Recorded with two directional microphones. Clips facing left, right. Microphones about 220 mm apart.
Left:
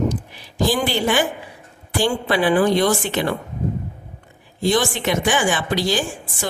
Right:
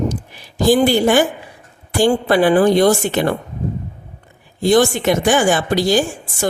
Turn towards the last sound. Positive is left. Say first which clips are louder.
# right 7 dB
turn(degrees=-45)  # may be behind; listen again after turning